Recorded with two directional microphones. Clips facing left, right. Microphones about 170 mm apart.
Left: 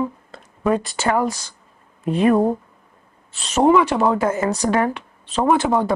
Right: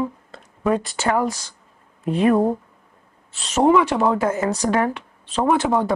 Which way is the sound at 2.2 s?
30° left (ahead or behind).